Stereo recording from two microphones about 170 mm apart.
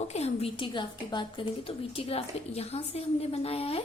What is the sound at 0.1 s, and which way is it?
A woman's voice, 35° left (ahead or behind).